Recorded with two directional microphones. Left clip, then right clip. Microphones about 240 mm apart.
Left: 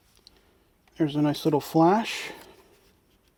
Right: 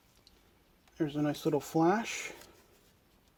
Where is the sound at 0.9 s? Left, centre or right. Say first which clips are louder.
Left 8 dB; left.